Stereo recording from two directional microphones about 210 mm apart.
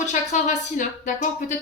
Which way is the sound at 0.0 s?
35° left (ahead or behind).